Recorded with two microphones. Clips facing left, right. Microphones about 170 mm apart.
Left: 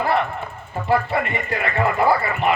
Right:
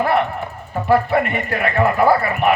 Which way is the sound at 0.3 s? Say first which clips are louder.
Right 4 dB; 65° right (ahead or behind).